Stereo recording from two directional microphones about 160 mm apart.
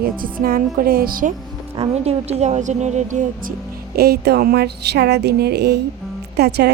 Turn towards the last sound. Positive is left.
turn(degrees=-90)